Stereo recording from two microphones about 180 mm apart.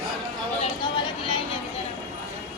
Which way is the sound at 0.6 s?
25° left (ahead or behind).